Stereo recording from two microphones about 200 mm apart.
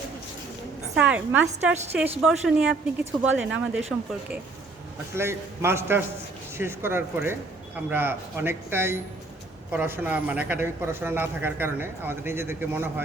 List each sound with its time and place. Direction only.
0.9 s a man's voice: 5° right (ahead or behind)
5.1 s a man's voice: 10° right (ahead or behind)